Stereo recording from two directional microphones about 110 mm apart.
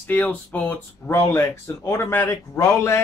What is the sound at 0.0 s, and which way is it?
Speech, 15° left (ahead or behind).